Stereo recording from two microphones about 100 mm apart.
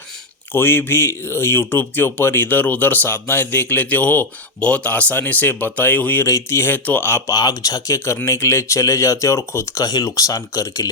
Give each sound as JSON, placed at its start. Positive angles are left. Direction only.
{"t": 0.5, "sound": "speech", "side_deg": 25}
{"t": 6.2, "sound": "speech", "side_deg": 30}
{"t": 7.3, "sound": "speech", "side_deg": 40}